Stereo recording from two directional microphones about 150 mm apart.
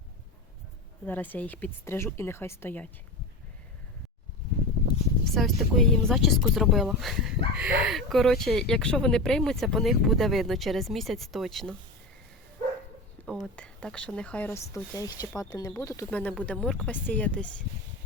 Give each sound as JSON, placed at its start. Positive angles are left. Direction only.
{"t": 1.0, "sound": "speech", "side_deg": 10}
{"t": 5.2, "sound": "speech", "side_deg": 0}
{"t": 13.2, "sound": "speech", "side_deg": 5}
{"t": 16.0, "sound": "speech", "side_deg": 10}